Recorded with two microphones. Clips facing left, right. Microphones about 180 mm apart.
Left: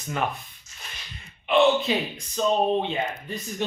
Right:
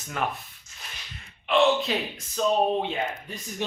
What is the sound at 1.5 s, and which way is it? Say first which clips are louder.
Speech: left 2 dB; centre (ahead or behind).